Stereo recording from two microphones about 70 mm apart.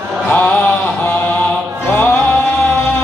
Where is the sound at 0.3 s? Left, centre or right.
Left.